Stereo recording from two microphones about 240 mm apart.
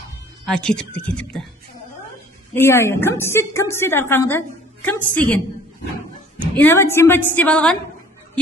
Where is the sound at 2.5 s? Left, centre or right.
Centre.